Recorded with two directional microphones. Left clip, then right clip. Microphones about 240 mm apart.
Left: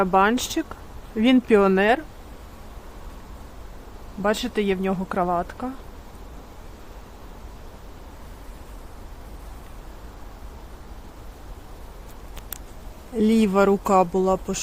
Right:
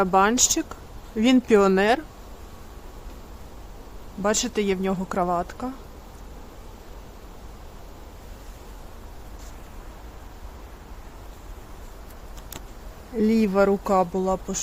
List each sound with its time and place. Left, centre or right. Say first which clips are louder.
0.0 s speech: even; centre
4.2 s speech: left 1 dB; centre
13.1 s speech: left 1 dB; centre